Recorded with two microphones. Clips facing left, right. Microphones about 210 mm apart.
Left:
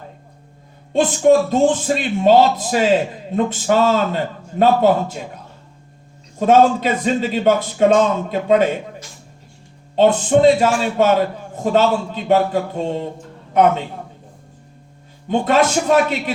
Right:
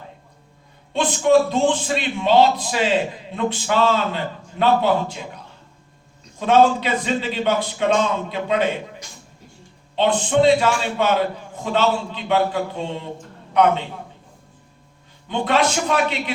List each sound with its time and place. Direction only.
0.9 s speech: 45° left (ahead or behind)
6.4 s speech: 45° left (ahead or behind)
9.9 s speech: 45° left (ahead or behind)
15.3 s speech: 45° left (ahead or behind)